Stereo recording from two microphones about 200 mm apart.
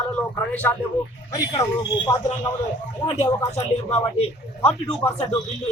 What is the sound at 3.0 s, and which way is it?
Speech, 30° left (ahead or behind).